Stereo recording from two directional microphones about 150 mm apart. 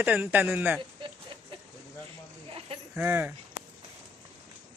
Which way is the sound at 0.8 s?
35° right (ahead or behind).